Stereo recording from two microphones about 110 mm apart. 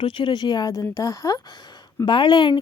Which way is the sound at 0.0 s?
50° left (ahead or behind).